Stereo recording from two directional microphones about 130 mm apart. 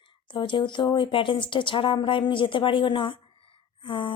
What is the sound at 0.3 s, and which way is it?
Speech, 40° left (ahead or behind).